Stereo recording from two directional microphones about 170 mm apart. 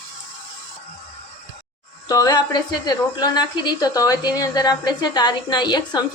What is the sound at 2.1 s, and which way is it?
A woman's voice, 20° left (ahead or behind).